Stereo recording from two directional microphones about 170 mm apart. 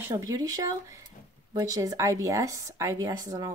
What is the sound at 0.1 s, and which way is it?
A woman's voice, 20° right (ahead or behind).